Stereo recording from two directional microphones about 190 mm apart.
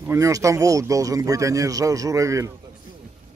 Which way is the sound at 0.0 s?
15° right (ahead or behind).